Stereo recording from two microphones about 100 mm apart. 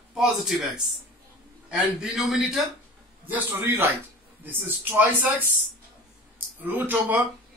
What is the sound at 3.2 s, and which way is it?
Speech, 20° right (ahead or behind).